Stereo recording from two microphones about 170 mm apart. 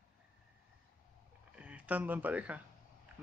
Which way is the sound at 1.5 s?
10° right (ahead or behind).